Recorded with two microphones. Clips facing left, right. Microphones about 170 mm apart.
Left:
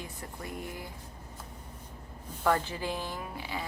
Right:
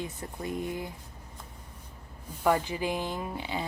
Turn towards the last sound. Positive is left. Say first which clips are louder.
# right 4 dB
turn(degrees=-25)  # may be behind; listen again after turning